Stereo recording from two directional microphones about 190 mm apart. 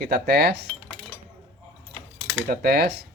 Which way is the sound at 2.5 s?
55° right (ahead or behind).